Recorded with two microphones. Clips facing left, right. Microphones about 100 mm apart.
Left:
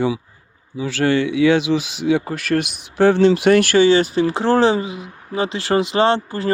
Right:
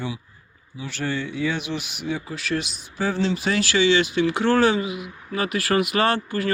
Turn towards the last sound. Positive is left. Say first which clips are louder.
# left 5 dB
turn(degrees=30)  # may be behind; listen again after turning